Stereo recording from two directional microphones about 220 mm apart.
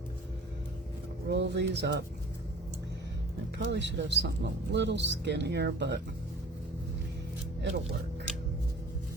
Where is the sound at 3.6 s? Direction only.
55° right (ahead or behind).